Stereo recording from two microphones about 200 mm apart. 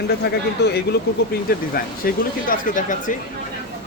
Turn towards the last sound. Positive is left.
turn(degrees=40)  # may be behind; listen again after turning